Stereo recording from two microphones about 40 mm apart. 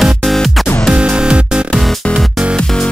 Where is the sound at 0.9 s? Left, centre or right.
Right.